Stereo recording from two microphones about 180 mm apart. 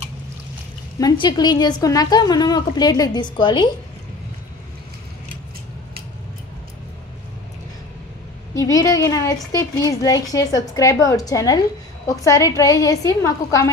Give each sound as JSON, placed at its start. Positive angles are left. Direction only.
{"t": 0.9, "sound": "a woman's voice", "side_deg": 25}
{"t": 8.5, "sound": "a woman's voice", "side_deg": 20}